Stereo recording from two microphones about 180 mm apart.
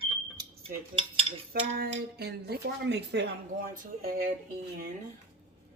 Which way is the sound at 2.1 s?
65° right (ahead or behind).